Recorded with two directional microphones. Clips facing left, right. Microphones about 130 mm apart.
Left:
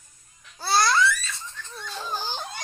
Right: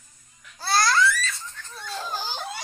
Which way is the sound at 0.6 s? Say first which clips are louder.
Even; centre (ahead or behind).